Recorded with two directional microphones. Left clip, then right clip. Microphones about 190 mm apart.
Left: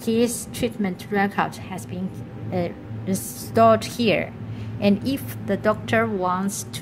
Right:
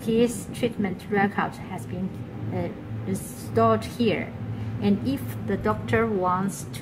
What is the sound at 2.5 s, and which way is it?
A woman's voice, 45° left (ahead or behind).